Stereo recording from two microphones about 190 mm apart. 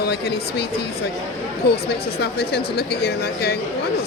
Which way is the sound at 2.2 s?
55° left (ahead or behind).